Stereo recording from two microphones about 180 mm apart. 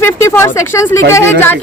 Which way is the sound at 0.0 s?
15° left (ahead or behind).